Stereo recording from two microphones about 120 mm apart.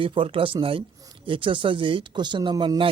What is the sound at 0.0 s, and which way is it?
A man's voice, 45° right (ahead or behind).